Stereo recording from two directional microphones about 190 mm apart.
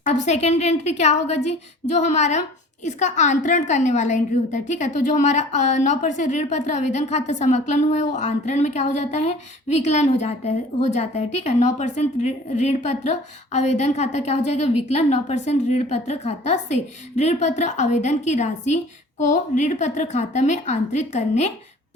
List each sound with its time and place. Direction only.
0.0 s a woman's voice: 35° left (ahead or behind)